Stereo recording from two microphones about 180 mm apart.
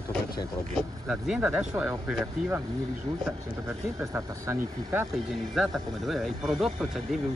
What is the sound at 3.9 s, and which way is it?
Speech, 15° right (ahead or behind).